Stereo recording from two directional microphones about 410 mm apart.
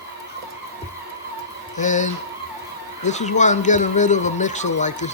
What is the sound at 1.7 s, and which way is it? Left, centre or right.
Speech, centre.